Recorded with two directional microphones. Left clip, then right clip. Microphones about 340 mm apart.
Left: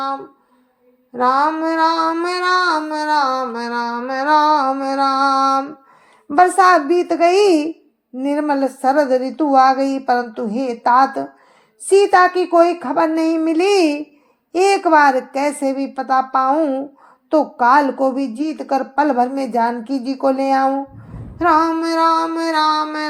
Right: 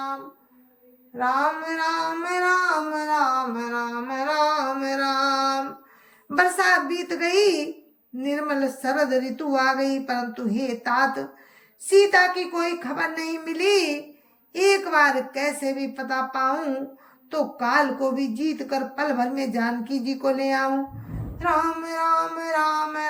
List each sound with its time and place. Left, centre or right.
1.2 s child singing: centre